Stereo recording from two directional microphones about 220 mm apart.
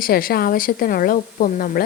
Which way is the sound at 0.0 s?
40° left (ahead or behind).